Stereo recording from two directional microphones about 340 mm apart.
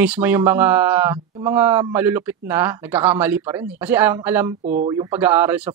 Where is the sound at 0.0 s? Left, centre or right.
Centre.